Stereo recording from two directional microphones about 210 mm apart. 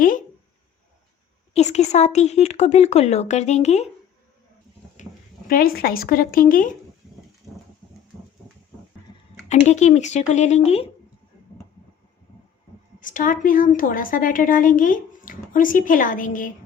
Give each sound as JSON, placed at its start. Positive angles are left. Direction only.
{"t": 1.5, "sound": "a woman's voice", "side_deg": 30}
{"t": 5.5, "sound": "speech", "side_deg": 45}
{"t": 9.5, "sound": "a woman's voice", "side_deg": 35}
{"t": 13.0, "sound": "a woman's voice", "side_deg": 40}